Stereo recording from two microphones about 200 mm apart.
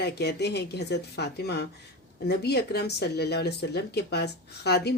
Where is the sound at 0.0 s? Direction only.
55° left (ahead or behind).